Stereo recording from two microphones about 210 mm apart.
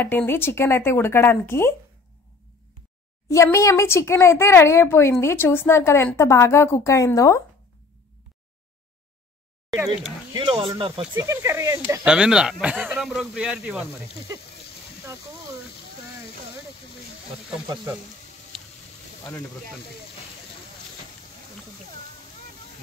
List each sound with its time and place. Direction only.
0.0 s speech: 10° left (ahead or behind)
3.3 s speech: 15° left (ahead or behind)
10.3 s speech: 25° right (ahead or behind); by 13.8 s 5° right (ahead or behind)